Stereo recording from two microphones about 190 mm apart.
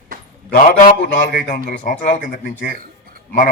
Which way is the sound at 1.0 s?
45° left (ahead or behind).